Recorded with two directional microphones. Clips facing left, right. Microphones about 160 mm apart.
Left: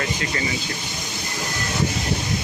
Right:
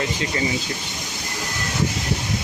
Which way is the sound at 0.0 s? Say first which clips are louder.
Right 2 dB; 25° right (ahead or behind).